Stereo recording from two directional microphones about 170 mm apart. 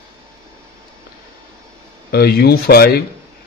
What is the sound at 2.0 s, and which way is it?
Speech, 65° left (ahead or behind).